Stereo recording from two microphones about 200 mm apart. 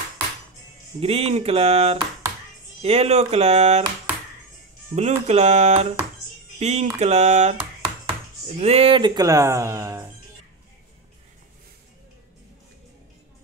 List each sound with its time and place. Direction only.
1.0 s speech: 30° right (ahead or behind)
4.9 s speech: 35° right (ahead or behind); by 10.0 s 15° right (ahead or behind)